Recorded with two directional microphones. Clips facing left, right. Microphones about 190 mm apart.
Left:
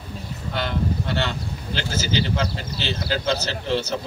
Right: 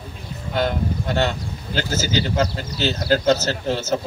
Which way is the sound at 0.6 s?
45° right (ahead or behind).